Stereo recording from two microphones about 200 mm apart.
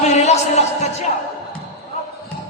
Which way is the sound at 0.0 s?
35° left (ahead or behind).